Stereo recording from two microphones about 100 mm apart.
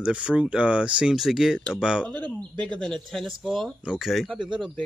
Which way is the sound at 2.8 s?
5° left (ahead or behind).